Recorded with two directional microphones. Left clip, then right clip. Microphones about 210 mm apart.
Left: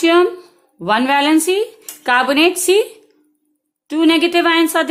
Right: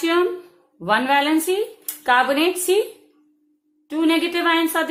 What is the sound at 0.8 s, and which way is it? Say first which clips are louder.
Speech: left 3 dB; 35° left (ahead or behind).